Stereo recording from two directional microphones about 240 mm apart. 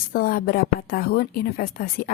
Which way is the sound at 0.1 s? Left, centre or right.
Left.